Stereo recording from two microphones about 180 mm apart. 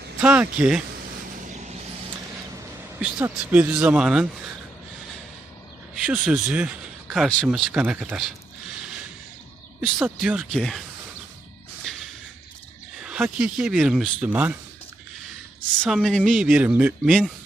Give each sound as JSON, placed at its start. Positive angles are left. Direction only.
{"t": 0.2, "sound": "speech", "side_deg": -5}
{"t": 1.5, "sound": "a sound", "side_deg": -40}
{"t": 3.0, "sound": "speech", "side_deg": -5}
{"t": 5.9, "sound": "speech", "side_deg": -5}
{"t": 9.8, "sound": "speech", "side_deg": -5}
{"t": 11.9, "sound": "a sound", "side_deg": 5}
{"t": 13.0, "sound": "speech", "side_deg": -5}
{"t": 15.8, "sound": "speech", "side_deg": 0}